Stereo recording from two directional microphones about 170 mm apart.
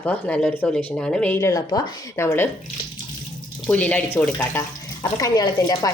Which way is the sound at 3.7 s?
10° left (ahead or behind).